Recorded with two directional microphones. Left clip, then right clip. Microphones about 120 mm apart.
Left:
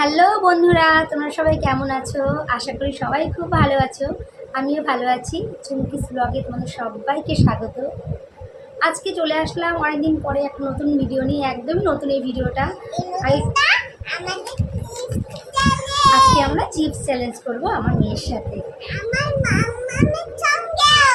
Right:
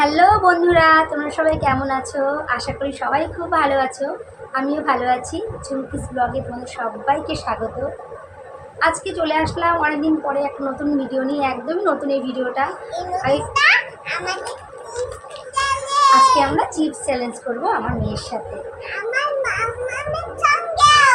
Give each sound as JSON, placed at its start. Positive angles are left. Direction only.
{"t": 0.0, "sound": "a woman's voice", "side_deg": 20}
{"t": 8.8, "sound": "a woman's voice", "side_deg": 20}
{"t": 12.9, "sound": "a child's voice", "side_deg": -15}
{"t": 13.3, "sound": "a sound", "side_deg": -10}
{"t": 15.5, "sound": "child singing", "side_deg": -5}
{"t": 16.3, "sound": "a woman's voice", "side_deg": 25}
{"t": 18.9, "sound": "a sound", "side_deg": 5}